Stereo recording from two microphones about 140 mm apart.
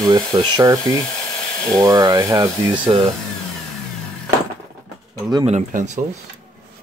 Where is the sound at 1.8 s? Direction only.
25° right (ahead or behind).